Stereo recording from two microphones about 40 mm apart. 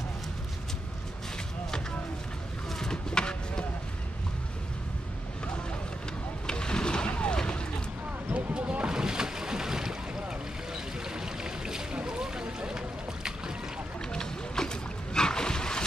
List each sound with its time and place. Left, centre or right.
2.8 s a sound: centre
6.4 s vehicle: left
8.3 s boat: right; by 10.2 s centre
11.1 s music: centre
12.1 s boat: centre
14.1 s boat: centre